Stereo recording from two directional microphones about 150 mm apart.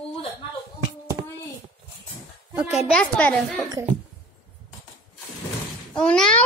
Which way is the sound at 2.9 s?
10° left (ahead or behind).